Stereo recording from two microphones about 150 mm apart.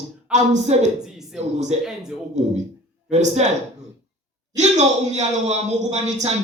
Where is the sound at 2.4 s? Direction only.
50° right (ahead or behind).